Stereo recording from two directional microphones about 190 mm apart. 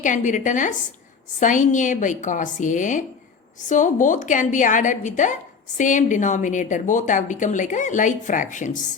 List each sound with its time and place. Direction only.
0.0 s a woman's voice: 40° left (ahead or behind)